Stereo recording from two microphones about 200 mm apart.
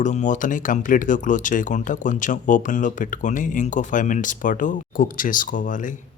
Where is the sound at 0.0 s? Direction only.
40° left (ahead or behind).